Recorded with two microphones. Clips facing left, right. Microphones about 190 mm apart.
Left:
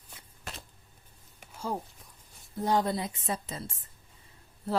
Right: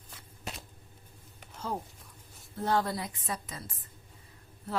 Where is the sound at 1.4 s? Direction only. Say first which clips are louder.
Left 3 dB; 10° left (ahead or behind).